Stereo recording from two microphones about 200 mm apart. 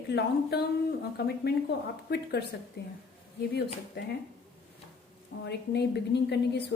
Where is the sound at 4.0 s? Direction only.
50° left (ahead or behind).